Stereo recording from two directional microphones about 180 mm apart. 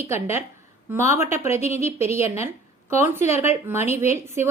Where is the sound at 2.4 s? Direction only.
15° right (ahead or behind).